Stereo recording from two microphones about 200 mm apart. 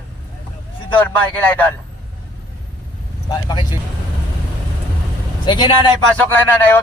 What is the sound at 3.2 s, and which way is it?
Speech, 20° left (ahead or behind).